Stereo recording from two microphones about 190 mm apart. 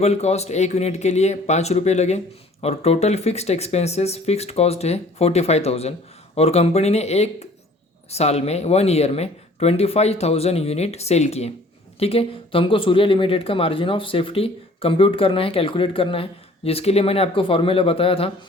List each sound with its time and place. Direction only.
0.0 s speech: 35° left (ahead or behind)